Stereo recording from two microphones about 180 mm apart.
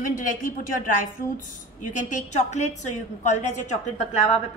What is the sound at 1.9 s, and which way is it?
A woman's voice, 45° left (ahead or behind).